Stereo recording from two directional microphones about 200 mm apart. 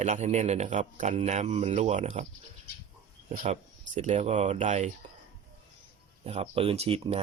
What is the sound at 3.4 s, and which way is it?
Speech, 35° right (ahead or behind).